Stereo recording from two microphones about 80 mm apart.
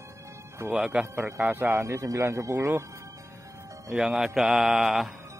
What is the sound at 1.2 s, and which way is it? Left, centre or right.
A man's voice, right.